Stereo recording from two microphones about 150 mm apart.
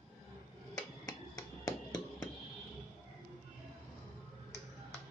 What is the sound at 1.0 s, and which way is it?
Finger snapping, 25° left (ahead or behind).